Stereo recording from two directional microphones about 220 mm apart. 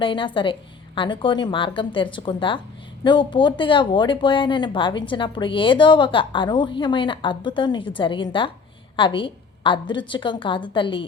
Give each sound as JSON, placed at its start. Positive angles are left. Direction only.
{"t": 0.0, "sound": "speech", "side_deg": 20}